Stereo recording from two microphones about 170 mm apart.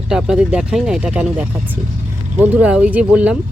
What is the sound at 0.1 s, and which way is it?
Speech, 5° right (ahead or behind).